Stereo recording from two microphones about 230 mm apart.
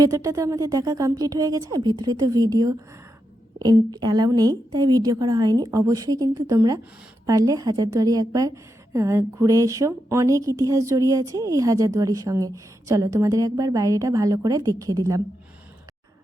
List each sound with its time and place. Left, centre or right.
0.0 s a woman's voice: centre